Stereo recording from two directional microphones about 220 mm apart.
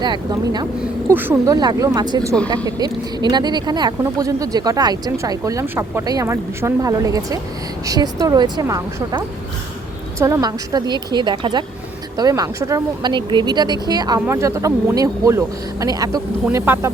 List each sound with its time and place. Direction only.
0.0 s a woman's voice: 20° right (ahead or behind)